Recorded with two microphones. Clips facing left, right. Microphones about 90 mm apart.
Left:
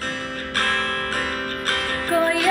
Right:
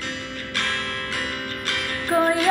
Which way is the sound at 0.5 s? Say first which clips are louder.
Left 4 dB; 40° left (ahead or behind).